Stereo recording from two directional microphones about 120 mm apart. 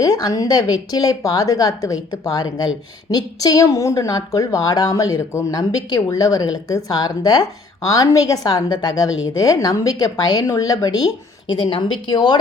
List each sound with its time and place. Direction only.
0.0 s a woman's voice: 30° left (ahead or behind)
11.4 s a woman's voice: 40° left (ahead or behind)